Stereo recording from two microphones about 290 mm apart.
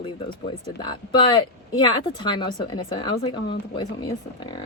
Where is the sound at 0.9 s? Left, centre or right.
Centre.